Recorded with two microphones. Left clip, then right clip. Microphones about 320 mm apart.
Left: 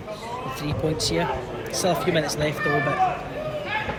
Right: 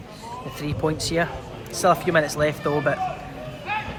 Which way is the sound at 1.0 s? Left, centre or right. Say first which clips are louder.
Even; centre.